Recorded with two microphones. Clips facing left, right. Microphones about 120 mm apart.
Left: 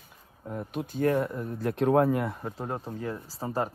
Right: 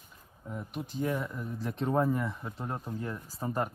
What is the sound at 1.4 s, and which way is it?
Speech, 55° left (ahead or behind).